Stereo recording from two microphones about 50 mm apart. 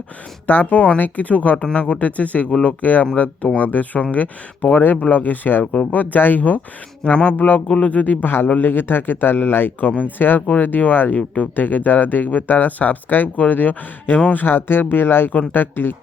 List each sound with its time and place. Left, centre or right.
0.4 s speech: left
7.0 s speech: left
7.3 s speech: left
7.7 s speech: left
14.3 s speech: left